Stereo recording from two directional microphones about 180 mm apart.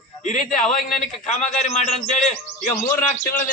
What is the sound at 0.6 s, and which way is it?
Speech, centre (ahead or behind).